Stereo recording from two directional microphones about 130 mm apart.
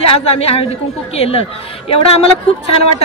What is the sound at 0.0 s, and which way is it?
A woman's voice, 50° left (ahead or behind).